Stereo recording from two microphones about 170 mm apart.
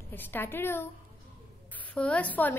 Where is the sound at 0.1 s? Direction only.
10° left (ahead or behind).